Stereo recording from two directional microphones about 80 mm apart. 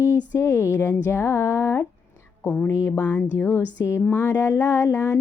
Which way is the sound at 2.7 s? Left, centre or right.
Left.